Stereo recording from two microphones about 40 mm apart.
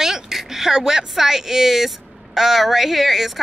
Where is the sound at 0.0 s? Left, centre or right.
Centre.